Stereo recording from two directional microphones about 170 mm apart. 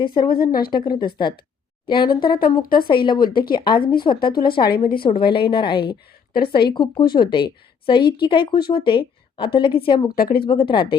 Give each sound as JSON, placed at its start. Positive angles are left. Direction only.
{"t": 0.0, "sound": "a woman's voice", "side_deg": 25}
{"t": 0.3, "sound": "a woman's voice", "side_deg": 60}
{"t": 0.9, "sound": "a woman's voice", "side_deg": 25}
{"t": 4.7, "sound": "a woman's voice", "side_deg": 60}
{"t": 5.0, "sound": "a woman's voice", "side_deg": 30}
{"t": 10.2, "sound": "a woman's voice", "side_deg": 60}
{"t": 10.4, "sound": "a woman's voice", "side_deg": 30}